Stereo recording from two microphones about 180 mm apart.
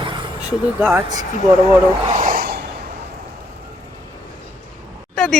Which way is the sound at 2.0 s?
45° right (ahead or behind).